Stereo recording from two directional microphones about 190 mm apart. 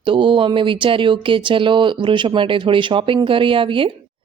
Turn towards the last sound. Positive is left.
turn(degrees=-25)  # may be behind; listen again after turning